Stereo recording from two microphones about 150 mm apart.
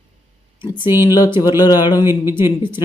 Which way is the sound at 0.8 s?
15° right (ahead or behind).